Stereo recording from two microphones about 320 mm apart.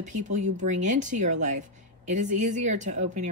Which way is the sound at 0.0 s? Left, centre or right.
Right.